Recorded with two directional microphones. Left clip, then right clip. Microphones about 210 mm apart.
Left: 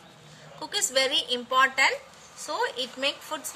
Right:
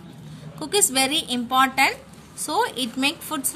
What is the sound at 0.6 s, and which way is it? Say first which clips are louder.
A woman's voice: right 4 dB; 50° right (ahead or behind).